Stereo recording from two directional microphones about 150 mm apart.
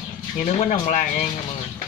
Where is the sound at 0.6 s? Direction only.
55° left (ahead or behind).